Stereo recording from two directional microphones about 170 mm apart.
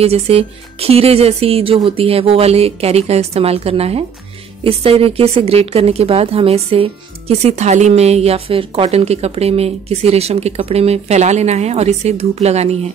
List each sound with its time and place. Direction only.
0.0 s speech: 35° right (ahead or behind)